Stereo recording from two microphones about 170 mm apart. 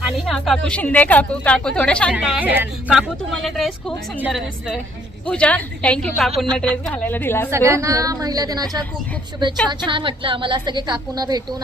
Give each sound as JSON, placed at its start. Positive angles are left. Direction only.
{"t": 0.3, "sound": "a woman's voice", "side_deg": 0}
{"t": 2.1, "sound": "a woman's voice", "side_deg": -5}
{"t": 7.5, "sound": "a woman's voice", "side_deg": -15}